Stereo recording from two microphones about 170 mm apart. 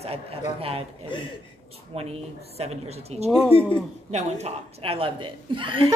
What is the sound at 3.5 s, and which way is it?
Speech, 35° left (ahead or behind).